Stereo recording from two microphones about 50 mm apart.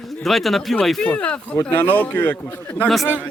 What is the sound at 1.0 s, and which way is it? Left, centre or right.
Speech, left.